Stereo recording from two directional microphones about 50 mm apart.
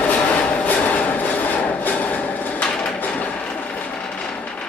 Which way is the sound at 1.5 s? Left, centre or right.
Left.